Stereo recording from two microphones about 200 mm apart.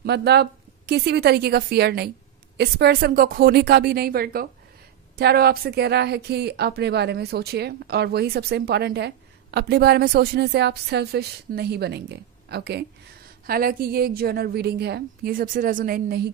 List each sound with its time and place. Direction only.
0.0 s a woman's voice: 55° right (ahead or behind)